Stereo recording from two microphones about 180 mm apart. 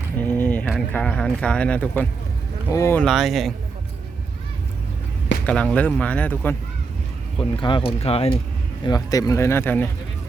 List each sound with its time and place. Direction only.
0.2 s a sound: 10° left (ahead or behind)
0.9 s speech: 5° left (ahead or behind)
5.5 s speech: 5° left (ahead or behind)
7.3 s speech: 25° left (ahead or behind)
8.8 s speech: 20° left (ahead or behind)